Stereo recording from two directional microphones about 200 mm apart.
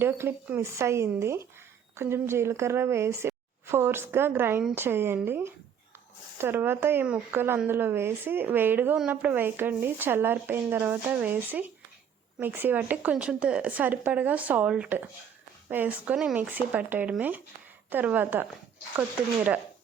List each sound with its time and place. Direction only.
0.0 s speech: 10° right (ahead or behind)